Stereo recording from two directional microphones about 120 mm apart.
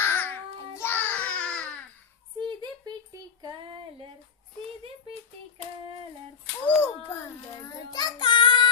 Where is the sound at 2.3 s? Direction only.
35° right (ahead or behind).